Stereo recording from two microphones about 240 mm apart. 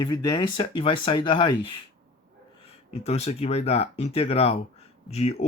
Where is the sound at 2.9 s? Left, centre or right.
Left.